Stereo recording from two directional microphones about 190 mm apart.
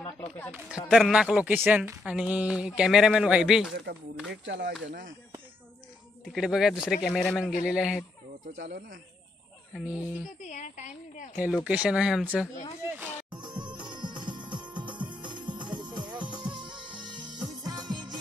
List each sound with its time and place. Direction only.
0.0 s a sound: 10° left (ahead or behind)
0.8 s speech: centre (ahead or behind)
4.3 s speech: 65° right (ahead or behind)
6.2 s speech: 5° right (ahead or behind)
8.5 s speech: 65° right (ahead or behind)
9.9 s speech: 40° left (ahead or behind)
11.3 s speech: 5° right (ahead or behind)
13.3 s music: 25° right (ahead or behind)
13.7 s music: 5° right (ahead or behind)
13.9 s music: 25° right (ahead or behind)